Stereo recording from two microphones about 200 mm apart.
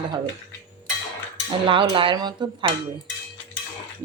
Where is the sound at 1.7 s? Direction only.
25° right (ahead or behind).